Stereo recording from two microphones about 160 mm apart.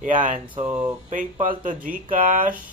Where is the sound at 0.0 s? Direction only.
55° right (ahead or behind).